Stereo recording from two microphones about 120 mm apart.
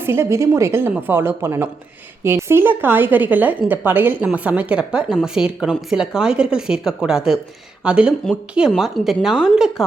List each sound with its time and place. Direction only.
0.0 s a woman's voice: 20° right (ahead or behind); by 9.8 s 5° right (ahead or behind)